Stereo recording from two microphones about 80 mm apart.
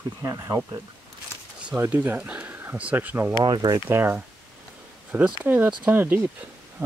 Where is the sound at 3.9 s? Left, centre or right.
Right.